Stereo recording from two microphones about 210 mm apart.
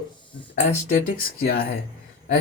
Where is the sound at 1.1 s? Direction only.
45° left (ahead or behind).